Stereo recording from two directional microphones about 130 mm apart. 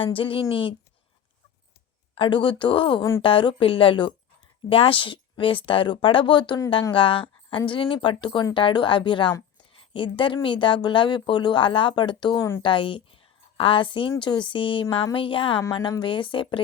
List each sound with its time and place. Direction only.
0.0 s speech: 45° left (ahead or behind)
2.1 s speech: 40° left (ahead or behind)